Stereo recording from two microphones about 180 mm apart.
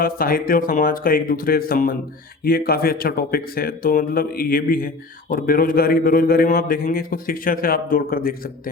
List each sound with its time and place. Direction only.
0.0 s a man's voice: 55° left (ahead or behind)